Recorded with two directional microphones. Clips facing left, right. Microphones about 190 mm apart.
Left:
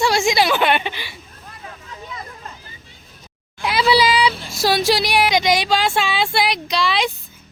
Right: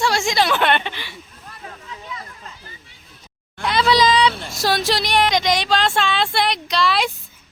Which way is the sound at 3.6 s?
5° left (ahead or behind).